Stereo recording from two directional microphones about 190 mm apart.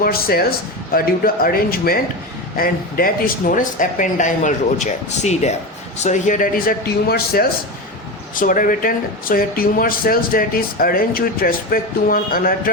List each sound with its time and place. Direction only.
0.0 s speech: 50° left (ahead or behind)